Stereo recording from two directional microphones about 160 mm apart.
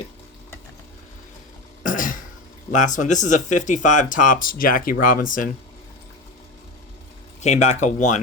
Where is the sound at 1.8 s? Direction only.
55° left (ahead or behind).